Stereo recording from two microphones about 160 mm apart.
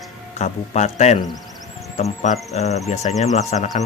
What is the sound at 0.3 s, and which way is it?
Speech, 45° left (ahead or behind).